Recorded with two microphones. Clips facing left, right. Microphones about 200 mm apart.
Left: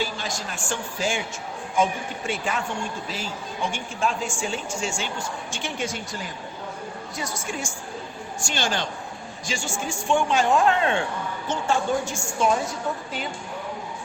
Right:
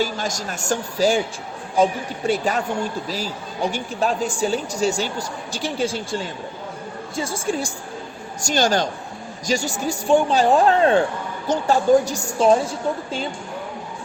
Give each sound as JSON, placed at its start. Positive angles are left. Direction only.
{"t": 0.0, "sound": "a woman's voice", "side_deg": -40}
{"t": 8.4, "sound": "a woman's voice", "side_deg": -40}